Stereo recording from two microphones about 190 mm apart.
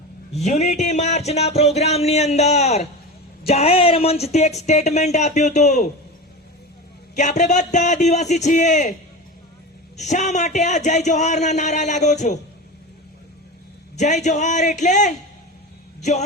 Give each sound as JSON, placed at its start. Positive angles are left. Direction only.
{"t": 0.3, "sound": "speech", "side_deg": 35}
{"t": 7.2, "sound": "speech", "side_deg": 40}
{"t": 10.0, "sound": "speech", "side_deg": 40}
{"t": 13.9, "sound": "speech", "side_deg": 35}